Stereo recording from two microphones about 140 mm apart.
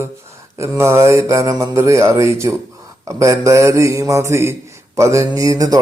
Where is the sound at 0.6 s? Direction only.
20° right (ahead or behind).